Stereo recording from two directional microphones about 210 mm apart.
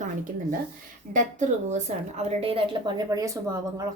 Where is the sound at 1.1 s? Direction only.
35° right (ahead or behind).